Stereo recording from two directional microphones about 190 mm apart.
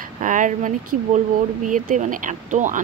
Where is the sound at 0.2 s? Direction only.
40° right (ahead or behind).